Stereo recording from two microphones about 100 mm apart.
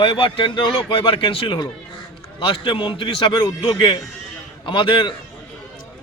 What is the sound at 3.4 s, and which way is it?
A man's voice, 40° left (ahead or behind).